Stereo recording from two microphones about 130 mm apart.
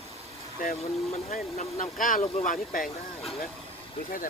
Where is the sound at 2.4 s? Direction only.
90° left.